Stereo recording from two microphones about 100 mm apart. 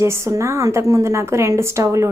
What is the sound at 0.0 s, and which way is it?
Speech, 25° right (ahead or behind).